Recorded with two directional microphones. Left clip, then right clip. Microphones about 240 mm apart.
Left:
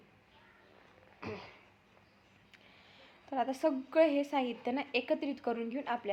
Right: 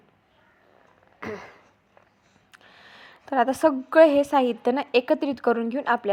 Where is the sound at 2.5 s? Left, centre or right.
Right.